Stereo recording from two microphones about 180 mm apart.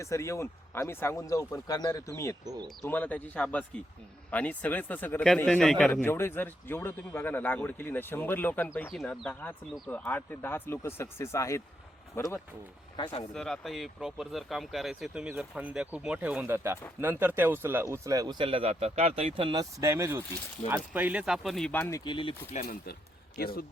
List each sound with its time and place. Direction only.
0.0 s a man's voice: 15° left (ahead or behind)
8.9 s a man's voice: centre (ahead or behind)
13.0 s speech: 25° left (ahead or behind)
13.3 s speech: centre (ahead or behind); by 19.6 s 30° right (ahead or behind)
19.8 s speech: 15° right (ahead or behind); by 22.4 s 25° left (ahead or behind)
22.6 s speech: 60° left (ahead or behind)